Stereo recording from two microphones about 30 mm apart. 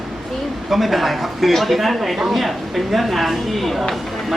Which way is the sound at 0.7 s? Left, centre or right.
Centre.